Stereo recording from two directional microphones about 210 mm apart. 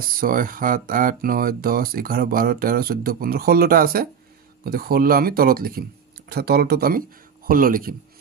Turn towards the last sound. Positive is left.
turn(degrees=-40)  # may be behind; listen again after turning